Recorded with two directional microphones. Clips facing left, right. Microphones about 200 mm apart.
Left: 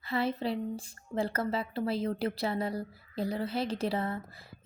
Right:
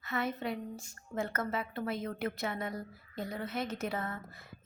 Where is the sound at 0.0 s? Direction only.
30° left (ahead or behind).